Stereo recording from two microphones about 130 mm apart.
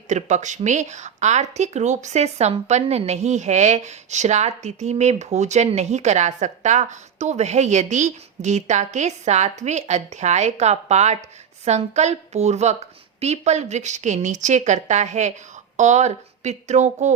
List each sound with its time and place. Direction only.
0.1 s a woman's voice: 65° right (ahead or behind)